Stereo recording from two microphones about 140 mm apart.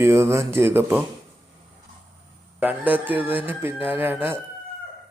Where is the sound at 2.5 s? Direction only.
10° right (ahead or behind).